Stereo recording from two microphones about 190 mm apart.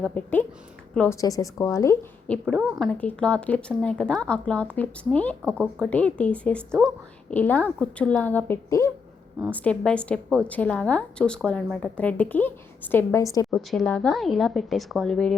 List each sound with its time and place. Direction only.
0.0 s speech: 10° left (ahead or behind)
1.2 s speech: 20° left (ahead or behind)
2.6 s speech: 5° right (ahead or behind); by 13.5 s 15° left (ahead or behind)
13.5 s speech: centre (ahead or behind)